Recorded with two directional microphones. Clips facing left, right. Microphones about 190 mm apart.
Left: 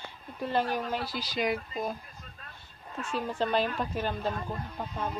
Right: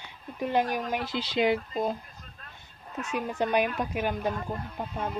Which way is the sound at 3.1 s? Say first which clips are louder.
Right 2 dB; 15° right (ahead or behind).